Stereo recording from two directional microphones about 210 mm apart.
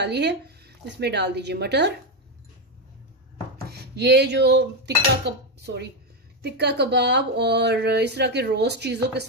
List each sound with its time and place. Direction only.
0.0 s speech: 55° right (ahead or behind)
3.6 s speech: 50° right (ahead or behind)